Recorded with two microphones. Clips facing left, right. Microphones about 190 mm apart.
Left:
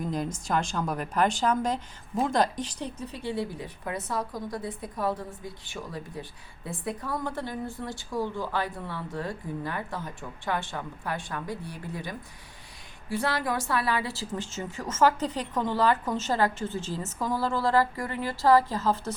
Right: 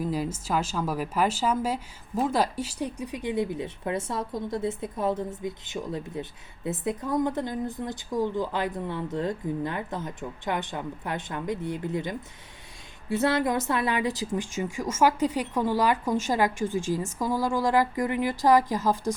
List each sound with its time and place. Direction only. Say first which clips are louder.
0.0 s a woman's voice: right 2 dB; 5° right (ahead or behind)